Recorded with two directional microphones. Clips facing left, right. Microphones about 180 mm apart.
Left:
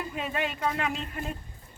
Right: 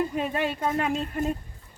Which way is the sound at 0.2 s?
45° right (ahead or behind).